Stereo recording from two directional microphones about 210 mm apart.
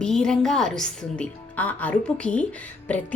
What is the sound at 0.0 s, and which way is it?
A woman's voice, 5° left (ahead or behind).